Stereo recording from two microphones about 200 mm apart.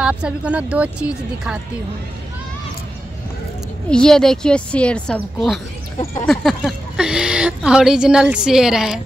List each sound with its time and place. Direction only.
0.0 s speech: 5° right (ahead or behind)
3.9 s speech: 5° left (ahead or behind)